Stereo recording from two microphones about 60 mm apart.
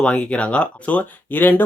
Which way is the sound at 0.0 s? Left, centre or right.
Centre.